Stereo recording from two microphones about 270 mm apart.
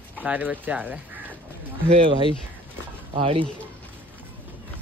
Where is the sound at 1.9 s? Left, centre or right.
Centre.